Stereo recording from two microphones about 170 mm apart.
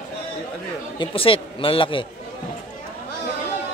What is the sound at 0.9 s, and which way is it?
Speech, 30° left (ahead or behind).